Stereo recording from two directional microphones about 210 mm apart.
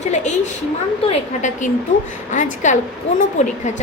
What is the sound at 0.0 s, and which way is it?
A woman's voice, 35° left (ahead or behind).